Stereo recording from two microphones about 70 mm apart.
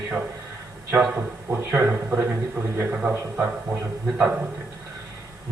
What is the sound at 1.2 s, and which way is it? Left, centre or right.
A man's voice, right.